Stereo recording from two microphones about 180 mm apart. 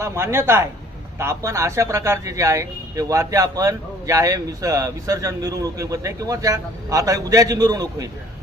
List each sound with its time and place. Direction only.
0.0 s speech: 15° right (ahead or behind)